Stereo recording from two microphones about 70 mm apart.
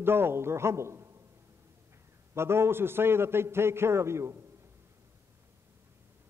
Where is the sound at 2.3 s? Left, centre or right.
Right.